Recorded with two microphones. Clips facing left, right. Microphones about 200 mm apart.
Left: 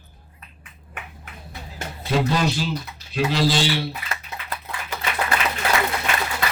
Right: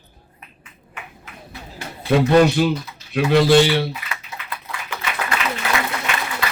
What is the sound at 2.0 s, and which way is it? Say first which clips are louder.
Speech: right 8 dB; 60° right (ahead or behind).